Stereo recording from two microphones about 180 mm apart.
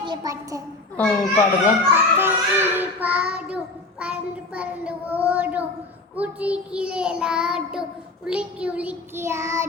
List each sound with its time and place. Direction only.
0.0 s a child's voice: 25° right (ahead or behind)
0.9 s a child's voice: 10° left (ahead or behind)
1.9 s child singing: 10° right (ahead or behind)